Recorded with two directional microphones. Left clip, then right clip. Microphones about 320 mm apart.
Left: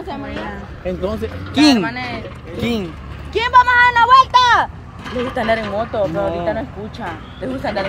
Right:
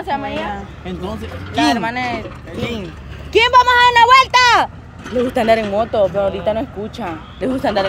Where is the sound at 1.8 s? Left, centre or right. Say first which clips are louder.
Right 2 dB; right.